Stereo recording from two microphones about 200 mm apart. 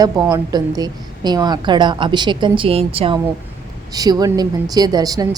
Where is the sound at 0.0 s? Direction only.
20° right (ahead or behind).